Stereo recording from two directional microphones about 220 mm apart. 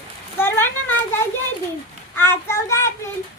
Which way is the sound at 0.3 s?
10° left (ahead or behind).